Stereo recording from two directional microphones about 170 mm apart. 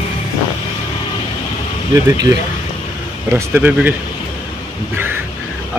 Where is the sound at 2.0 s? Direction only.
20° right (ahead or behind).